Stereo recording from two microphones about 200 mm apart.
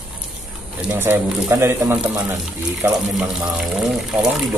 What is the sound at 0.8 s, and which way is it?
Speech, 10° right (ahead or behind).